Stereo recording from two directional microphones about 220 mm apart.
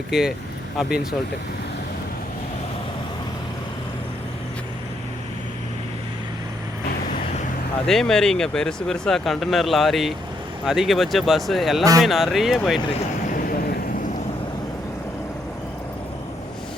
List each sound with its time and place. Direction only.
0.1 s speech: centre (ahead or behind)
7.9 s speech: centre (ahead or behind)
13.3 s vehicle: 40° left (ahead or behind)